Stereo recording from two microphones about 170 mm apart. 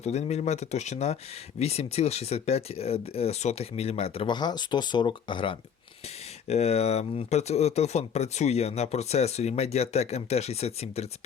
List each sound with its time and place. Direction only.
0.0 s speech: 40° left (ahead or behind)